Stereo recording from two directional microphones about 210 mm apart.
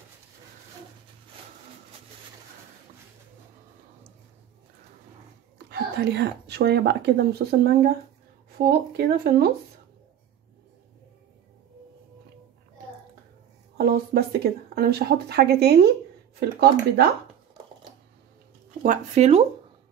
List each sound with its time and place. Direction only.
5.7 s speech: 50° right (ahead or behind)
13.7 s speech: 50° right (ahead or behind)
18.8 s speech: 35° right (ahead or behind)